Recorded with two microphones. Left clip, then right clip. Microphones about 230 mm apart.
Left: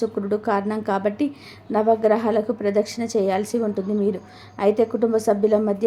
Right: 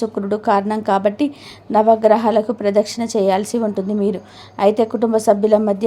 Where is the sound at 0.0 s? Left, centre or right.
Centre.